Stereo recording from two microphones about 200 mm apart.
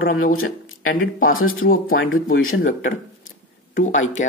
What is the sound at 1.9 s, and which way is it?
Speech, 80° left.